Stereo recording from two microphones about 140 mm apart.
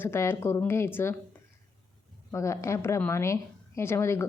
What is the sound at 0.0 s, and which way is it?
Speech, 15° left (ahead or behind).